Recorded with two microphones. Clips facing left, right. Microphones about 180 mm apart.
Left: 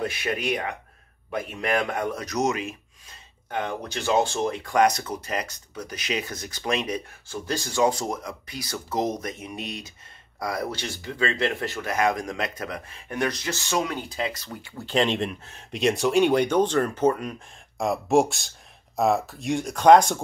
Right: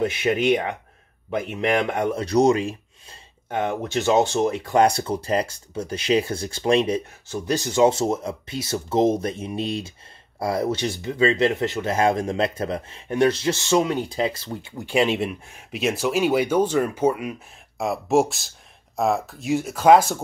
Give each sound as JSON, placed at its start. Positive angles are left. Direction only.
{"t": 0.0, "sound": "speech", "side_deg": -25}
{"t": 14.8, "sound": "speech", "side_deg": -10}